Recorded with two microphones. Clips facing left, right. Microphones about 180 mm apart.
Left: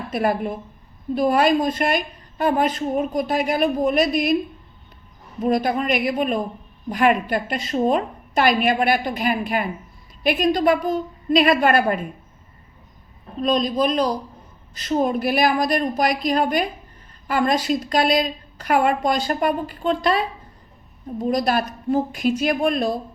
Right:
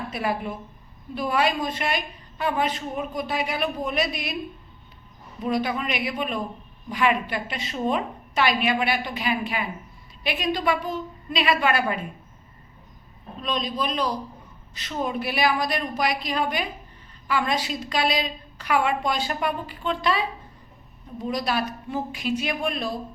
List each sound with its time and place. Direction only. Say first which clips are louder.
0.1 s a woman's voice: left 8 dB; 45° left (ahead or behind)
5.4 s a woman's voice: left 5 dB; 45° left (ahead or behind)
13.4 s a woman's voice: left 8 dB; 40° left (ahead or behind)